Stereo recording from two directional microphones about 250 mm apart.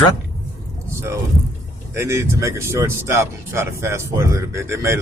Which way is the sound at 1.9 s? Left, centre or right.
Centre.